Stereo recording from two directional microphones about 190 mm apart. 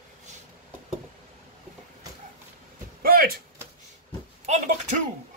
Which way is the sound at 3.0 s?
50° right (ahead or behind).